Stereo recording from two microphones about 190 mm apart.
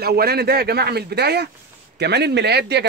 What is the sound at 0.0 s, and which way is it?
Speech, 55° right (ahead or behind).